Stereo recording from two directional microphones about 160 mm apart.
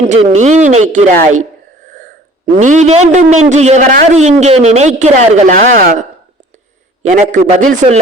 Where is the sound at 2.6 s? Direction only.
50° right (ahead or behind).